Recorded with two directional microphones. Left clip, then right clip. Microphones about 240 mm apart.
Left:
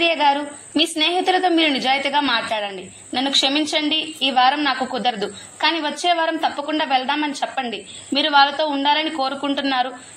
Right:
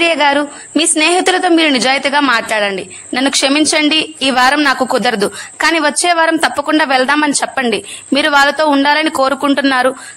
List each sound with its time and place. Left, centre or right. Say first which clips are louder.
0.0 s a woman's voice: right 6 dB; right